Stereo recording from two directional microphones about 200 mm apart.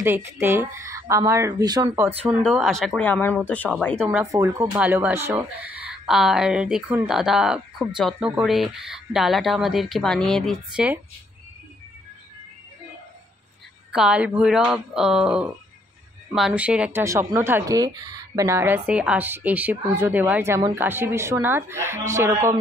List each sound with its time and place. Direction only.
0.0 s speech: 10° right (ahead or behind)
2.4 s speech: centre (ahead or behind)
4.1 s speech: 10° right (ahead or behind)
13.9 s speech: 5° right (ahead or behind)